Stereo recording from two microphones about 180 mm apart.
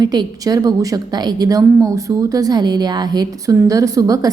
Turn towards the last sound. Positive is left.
turn(degrees=-20)  # may be behind; listen again after turning